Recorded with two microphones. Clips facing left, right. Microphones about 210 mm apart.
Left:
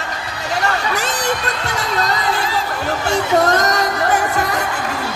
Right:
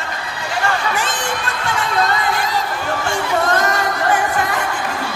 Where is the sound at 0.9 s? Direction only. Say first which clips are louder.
Left 2 dB; 40° left (ahead or behind).